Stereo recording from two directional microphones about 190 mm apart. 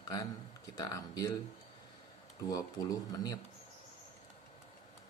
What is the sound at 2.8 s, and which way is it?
Speech, 20° left (ahead or behind).